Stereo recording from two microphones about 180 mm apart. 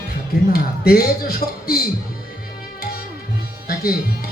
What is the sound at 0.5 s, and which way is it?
Speech, 55° left (ahead or behind).